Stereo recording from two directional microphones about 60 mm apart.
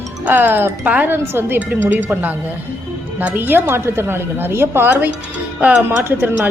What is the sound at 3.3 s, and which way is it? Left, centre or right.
A woman's voice, right.